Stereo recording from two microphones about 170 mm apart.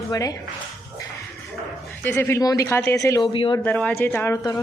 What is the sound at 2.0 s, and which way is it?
Speech, 15° left (ahead or behind).